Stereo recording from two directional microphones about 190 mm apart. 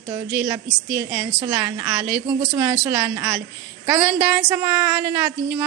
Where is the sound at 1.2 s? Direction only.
20° right (ahead or behind).